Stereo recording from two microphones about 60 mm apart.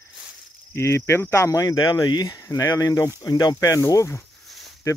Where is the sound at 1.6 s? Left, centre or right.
Left.